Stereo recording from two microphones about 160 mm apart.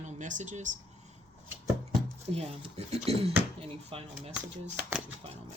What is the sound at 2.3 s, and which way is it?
Speech, 40° right (ahead or behind).